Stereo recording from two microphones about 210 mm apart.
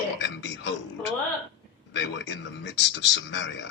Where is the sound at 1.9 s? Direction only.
60° left (ahead or behind).